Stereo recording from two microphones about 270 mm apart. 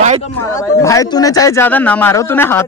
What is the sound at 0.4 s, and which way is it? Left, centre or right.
A man's voice, centre.